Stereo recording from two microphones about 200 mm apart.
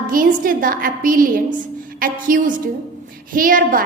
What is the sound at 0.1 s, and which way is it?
A woman's voice, 45° right (ahead or behind).